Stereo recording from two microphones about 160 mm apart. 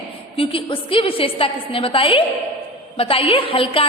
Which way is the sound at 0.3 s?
35° left (ahead or behind).